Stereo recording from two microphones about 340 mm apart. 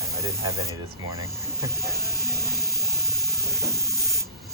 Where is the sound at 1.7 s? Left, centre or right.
Right.